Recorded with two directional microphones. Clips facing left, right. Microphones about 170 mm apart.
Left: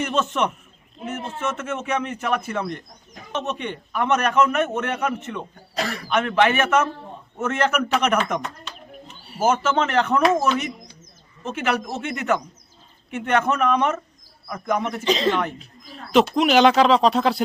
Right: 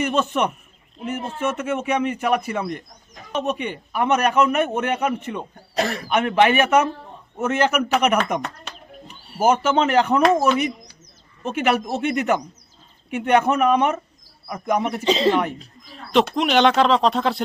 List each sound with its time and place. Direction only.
0.0 s a man's voice: 10° right (ahead or behind)
9.4 s a man's voice: 10° right (ahead or behind)
11.4 s a man's voice: 15° right (ahead or behind)
15.0 s speech: 30° right (ahead or behind)
16.1 s speech: centre (ahead or behind)